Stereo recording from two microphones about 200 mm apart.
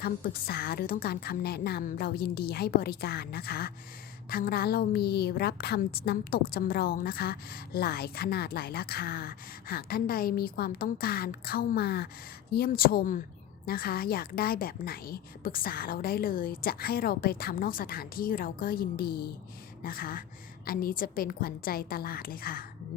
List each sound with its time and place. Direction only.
0.0 s a woman's voice: 50° left (ahead or behind)